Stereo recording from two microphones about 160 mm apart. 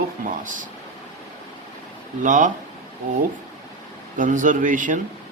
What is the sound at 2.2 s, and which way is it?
Speech, 55° right (ahead or behind).